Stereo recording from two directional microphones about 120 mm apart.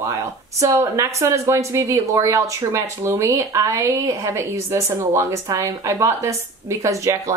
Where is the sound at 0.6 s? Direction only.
25° right (ahead or behind).